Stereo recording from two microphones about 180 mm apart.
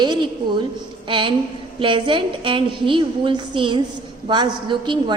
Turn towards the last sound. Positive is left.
turn(degrees=-25)  # may be behind; listen again after turning